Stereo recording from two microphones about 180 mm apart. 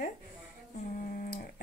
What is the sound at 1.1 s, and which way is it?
Speech, 50° left (ahead or behind).